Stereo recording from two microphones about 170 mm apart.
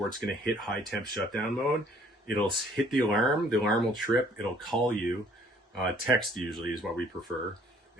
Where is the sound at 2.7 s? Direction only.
Centre (ahead or behind).